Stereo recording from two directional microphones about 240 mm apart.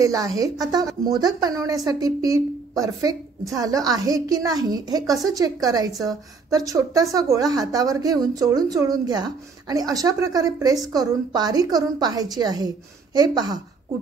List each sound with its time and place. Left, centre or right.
0.0 s a woman's voice: centre